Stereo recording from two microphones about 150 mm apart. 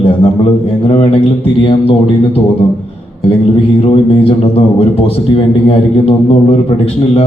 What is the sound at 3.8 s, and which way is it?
A man's voice, 40° left (ahead or behind).